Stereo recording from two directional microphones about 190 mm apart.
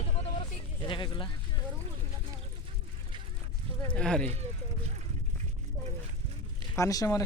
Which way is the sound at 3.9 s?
5° left (ahead or behind).